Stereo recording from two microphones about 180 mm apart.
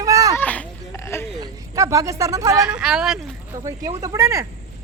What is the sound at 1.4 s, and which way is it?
Speech, 20° right (ahead or behind).